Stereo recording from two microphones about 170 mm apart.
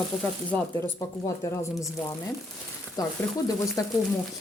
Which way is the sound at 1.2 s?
20° left (ahead or behind).